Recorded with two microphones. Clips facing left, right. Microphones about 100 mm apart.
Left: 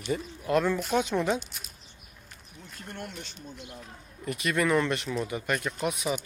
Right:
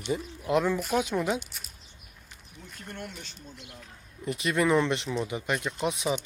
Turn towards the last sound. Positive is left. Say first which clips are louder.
# right 1 dB
turn(degrees=-25)  # may be behind; listen again after turning